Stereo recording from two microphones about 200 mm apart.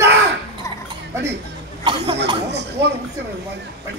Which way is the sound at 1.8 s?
25° right (ahead or behind).